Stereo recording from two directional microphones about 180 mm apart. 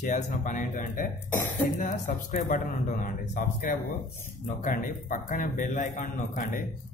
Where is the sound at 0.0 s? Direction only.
45° left (ahead or behind).